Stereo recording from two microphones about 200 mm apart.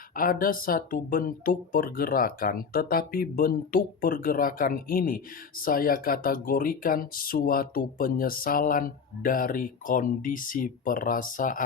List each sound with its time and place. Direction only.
0.2 s speech: 45° left (ahead or behind)